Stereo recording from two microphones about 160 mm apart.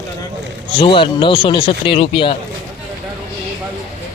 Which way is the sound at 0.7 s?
30° left (ahead or behind).